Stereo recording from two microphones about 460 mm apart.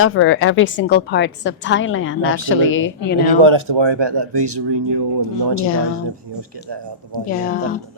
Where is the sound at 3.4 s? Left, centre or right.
Right.